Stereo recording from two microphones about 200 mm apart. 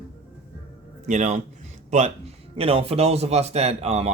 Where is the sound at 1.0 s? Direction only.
35° right (ahead or behind).